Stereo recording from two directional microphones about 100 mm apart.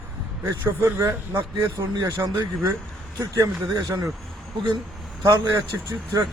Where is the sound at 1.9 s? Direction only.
35° right (ahead or behind).